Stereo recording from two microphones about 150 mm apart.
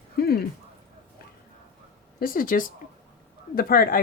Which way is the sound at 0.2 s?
90° left.